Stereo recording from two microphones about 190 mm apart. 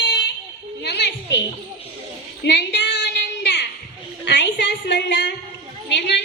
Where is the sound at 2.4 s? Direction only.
65° left (ahead or behind).